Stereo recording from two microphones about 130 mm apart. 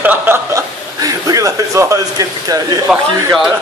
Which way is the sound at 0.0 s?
15° right (ahead or behind).